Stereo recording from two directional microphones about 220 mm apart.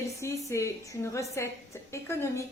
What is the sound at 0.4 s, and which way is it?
A woman's voice, 15° left (ahead or behind).